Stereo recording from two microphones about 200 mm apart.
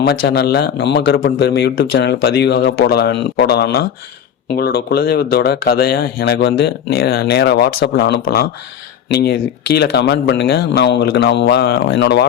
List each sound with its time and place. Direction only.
0.2 s speech: 55° left (ahead or behind)
9.7 s speech: 55° left (ahead or behind)